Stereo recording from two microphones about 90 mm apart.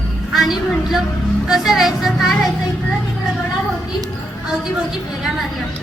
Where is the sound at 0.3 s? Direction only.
5° right (ahead or behind).